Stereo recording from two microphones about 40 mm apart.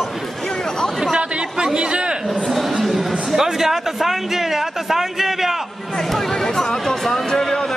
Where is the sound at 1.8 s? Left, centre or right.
Right.